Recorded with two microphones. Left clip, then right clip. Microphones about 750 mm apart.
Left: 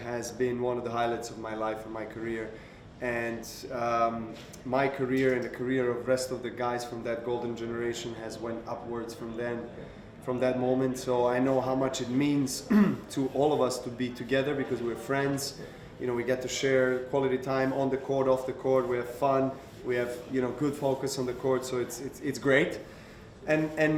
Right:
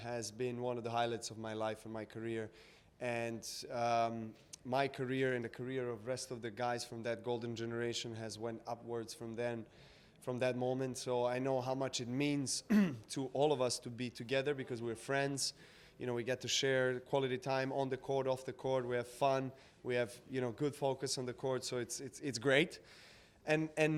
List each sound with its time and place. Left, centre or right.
0.0 s speech: right
3.0 s speech: right
10.2 s a man's voice: right